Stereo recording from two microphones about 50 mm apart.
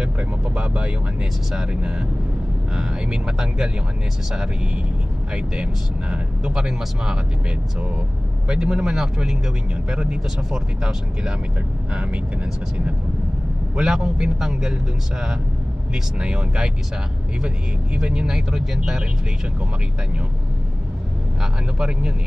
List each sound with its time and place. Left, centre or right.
0.6 s speech: right
5.3 s speech: centre
8.5 s speech: centre
13.7 s speech: centre
17.9 s speech: centre
18.3 s speech: centre
21.4 s speech: centre